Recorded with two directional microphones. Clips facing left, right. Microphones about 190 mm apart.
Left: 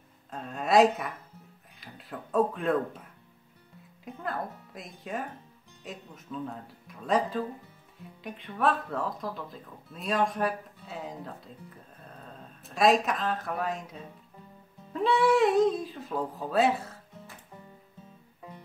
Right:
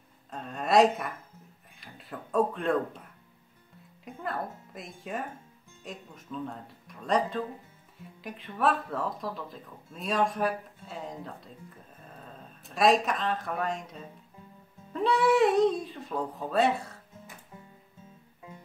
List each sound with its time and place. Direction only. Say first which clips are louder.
0.3 s speech: left 1 dB; centre (ahead or behind)